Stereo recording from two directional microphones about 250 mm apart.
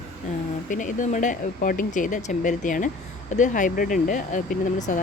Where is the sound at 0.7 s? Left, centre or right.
Left.